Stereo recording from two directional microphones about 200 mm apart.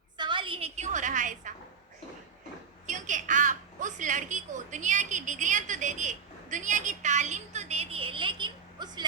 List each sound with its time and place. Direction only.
0.2 s a woman's voice: 25° right (ahead or behind); by 1.5 s 40° right (ahead or behind)
2.8 s a woman's voice: 40° right (ahead or behind); by 9.0 s 20° right (ahead or behind)